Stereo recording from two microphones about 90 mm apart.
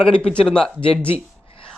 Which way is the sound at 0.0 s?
10° left (ahead or behind).